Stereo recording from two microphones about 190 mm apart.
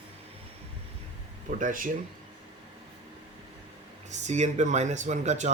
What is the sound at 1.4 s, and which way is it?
Speech, 45° right (ahead or behind).